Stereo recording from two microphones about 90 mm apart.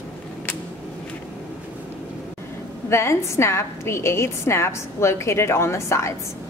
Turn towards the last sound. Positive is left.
turn(degrees=30)  # may be behind; listen again after turning